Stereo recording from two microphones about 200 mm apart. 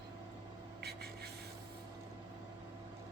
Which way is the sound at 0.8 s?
55° right (ahead or behind).